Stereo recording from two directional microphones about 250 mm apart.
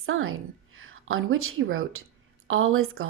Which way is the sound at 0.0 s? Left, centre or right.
Right.